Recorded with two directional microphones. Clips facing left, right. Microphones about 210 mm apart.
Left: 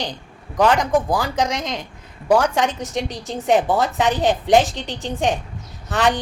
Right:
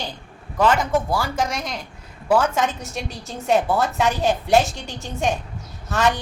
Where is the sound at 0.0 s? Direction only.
15° left (ahead or behind).